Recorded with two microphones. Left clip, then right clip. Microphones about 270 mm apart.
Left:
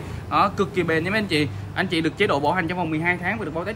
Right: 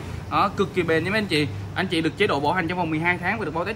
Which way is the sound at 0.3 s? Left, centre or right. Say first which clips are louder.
Left 2 dB; centre.